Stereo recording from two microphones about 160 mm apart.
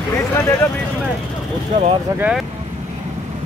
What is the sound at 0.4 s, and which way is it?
Speech, 20° left (ahead or behind).